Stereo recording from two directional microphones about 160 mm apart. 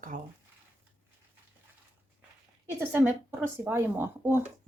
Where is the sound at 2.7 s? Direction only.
15° right (ahead or behind).